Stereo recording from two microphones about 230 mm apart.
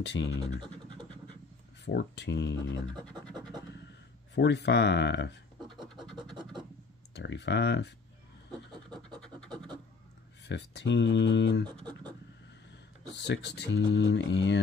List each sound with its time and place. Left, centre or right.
0.0 s speech: left
0.6 s scratch: right
1.9 s speech: left
4.4 s speech: left
7.2 s speech: left
9.2 s scratch: centre
10.5 s speech: left
11.8 s a sound: centre
13.1 s speech: left